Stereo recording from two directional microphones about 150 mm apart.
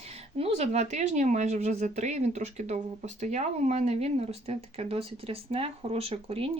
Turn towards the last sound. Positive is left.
turn(degrees=-40)  # may be behind; listen again after turning